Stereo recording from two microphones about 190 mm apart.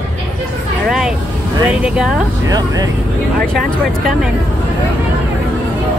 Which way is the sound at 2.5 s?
20° right (ahead or behind).